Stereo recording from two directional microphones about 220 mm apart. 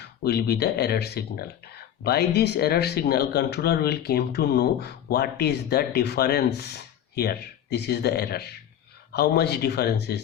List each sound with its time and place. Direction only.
0.0 s speech: 45° left (ahead or behind)